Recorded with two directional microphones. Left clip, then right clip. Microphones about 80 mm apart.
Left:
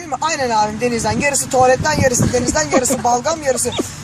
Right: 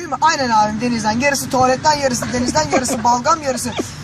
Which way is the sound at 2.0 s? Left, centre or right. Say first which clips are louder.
Left 3 dB; left.